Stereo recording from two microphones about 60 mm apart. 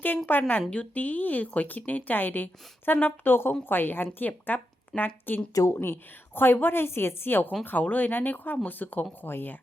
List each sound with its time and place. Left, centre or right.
0.3 s a woman's voice: left
5.5 s speech: left
5.8 s a woman's voice: left